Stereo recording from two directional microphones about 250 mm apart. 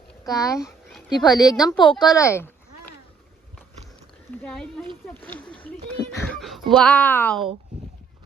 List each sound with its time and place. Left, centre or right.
0.3 s a woman's voice: centre
0.6 s a sound: centre
1.1 s a woman's voice: centre
4.4 s speech: centre